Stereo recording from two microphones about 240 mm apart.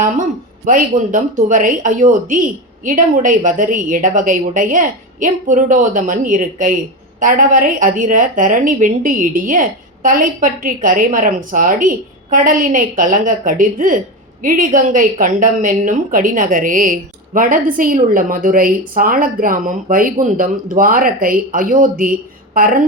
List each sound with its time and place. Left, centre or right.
0.6 s a woman's voice: right